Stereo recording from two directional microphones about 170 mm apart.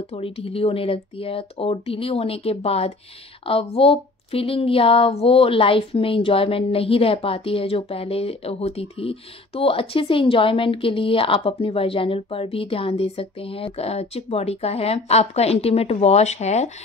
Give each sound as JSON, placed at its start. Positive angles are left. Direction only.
{"t": 0.1, "sound": "speech", "side_deg": 35}